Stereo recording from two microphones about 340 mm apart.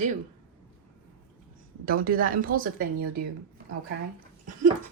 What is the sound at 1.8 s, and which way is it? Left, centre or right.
Speech, right.